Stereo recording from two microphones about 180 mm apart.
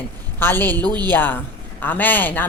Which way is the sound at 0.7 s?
20° right (ahead or behind).